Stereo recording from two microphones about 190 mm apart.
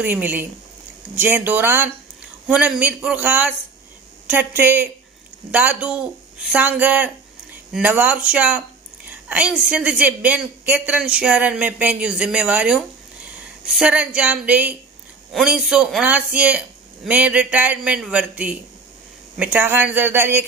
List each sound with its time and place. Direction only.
0.0 s a woman's voice: 10° right (ahead or behind)